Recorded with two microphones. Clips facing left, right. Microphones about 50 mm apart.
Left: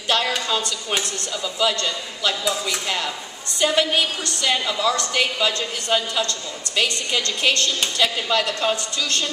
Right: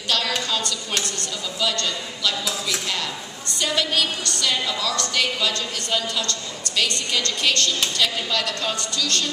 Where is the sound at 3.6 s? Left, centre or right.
Left.